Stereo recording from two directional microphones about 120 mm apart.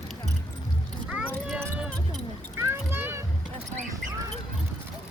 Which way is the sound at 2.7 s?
20° right (ahead or behind).